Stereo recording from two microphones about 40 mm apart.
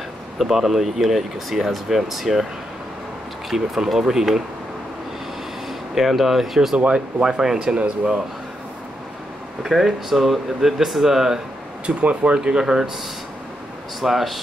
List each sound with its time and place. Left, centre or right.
0.4 s speech: centre
3.4 s speech: centre
5.9 s speech: centre
6.8 s speech: right
9.6 s speech: centre
11.8 s speech: right
12.4 s speech: centre
14.0 s speech: centre